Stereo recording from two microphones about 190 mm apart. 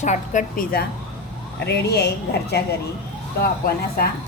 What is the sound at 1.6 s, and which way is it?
Speech, 60° left (ahead or behind).